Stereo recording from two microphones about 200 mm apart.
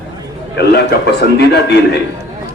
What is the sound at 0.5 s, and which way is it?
Speech, 55° left (ahead or behind).